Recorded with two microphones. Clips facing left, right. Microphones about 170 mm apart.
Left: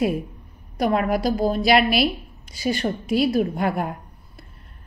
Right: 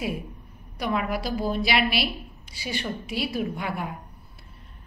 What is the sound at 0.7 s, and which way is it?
A woman's voice, 45° left (ahead or behind).